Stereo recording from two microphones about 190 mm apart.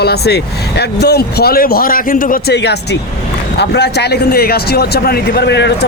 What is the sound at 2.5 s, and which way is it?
A man's voice, 60° left (ahead or behind).